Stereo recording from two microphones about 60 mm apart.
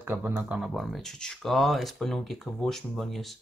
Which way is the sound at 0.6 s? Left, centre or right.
Centre.